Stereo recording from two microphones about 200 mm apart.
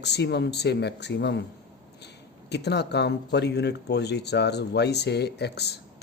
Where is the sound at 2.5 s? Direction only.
55° left (ahead or behind).